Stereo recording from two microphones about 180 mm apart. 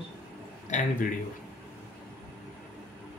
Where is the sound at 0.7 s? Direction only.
40° left (ahead or behind).